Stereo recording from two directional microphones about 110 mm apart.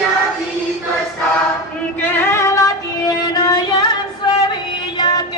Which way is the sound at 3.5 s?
40° left (ahead or behind).